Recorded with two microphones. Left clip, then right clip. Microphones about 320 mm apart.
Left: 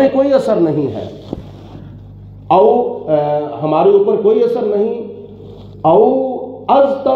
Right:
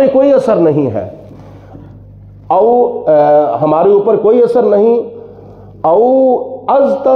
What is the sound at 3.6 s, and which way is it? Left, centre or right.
Speech, right.